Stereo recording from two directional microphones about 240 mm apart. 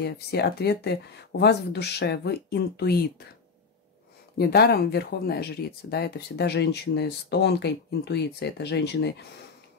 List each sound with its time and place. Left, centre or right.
0.0 s speech: left
4.4 s speech: left